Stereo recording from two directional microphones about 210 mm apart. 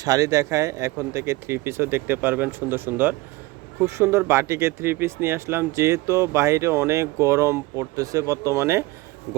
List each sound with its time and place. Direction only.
0.0 s speech: 15° right (ahead or behind)